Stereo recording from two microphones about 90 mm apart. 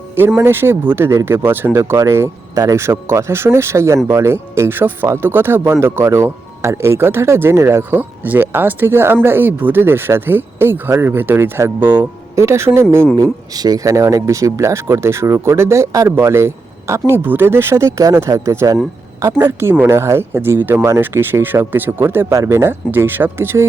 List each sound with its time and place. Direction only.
0.2 s speech: 25° right (ahead or behind)
13.1 s speech: 40° right (ahead or behind)
19.7 s speech: 25° right (ahead or behind)